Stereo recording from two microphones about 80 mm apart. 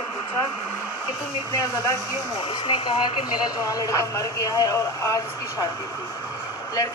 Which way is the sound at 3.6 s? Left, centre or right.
Left.